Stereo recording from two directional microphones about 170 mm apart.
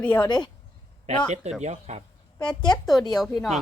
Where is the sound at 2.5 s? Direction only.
25° left (ahead or behind).